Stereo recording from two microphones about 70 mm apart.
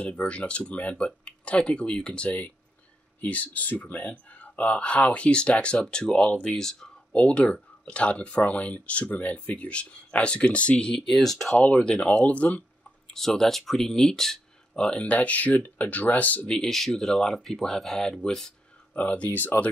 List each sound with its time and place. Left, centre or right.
0.0 s speech: centre
11.5 s speech: centre
13.1 s speech: centre
16.5 s speech: centre
18.9 s speech: centre